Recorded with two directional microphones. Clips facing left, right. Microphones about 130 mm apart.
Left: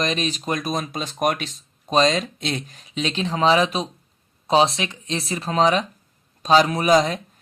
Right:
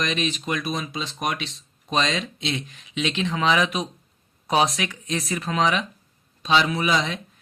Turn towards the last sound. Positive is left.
turn(degrees=40)  # may be behind; listen again after turning